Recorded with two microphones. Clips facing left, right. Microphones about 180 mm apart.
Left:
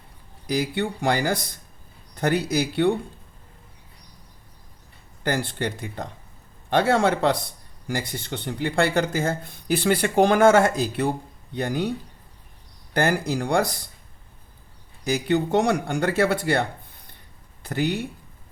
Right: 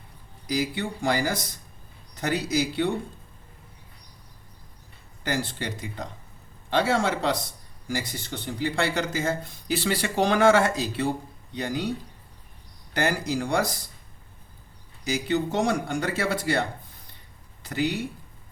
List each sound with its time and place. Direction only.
0.4 s speech: 55° left (ahead or behind)
5.2 s speech: 55° left (ahead or behind)
12.9 s speech: 55° left (ahead or behind)
15.0 s speech: 55° left (ahead or behind)